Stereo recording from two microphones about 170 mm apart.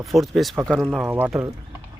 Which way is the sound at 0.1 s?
Centre (ahead or behind).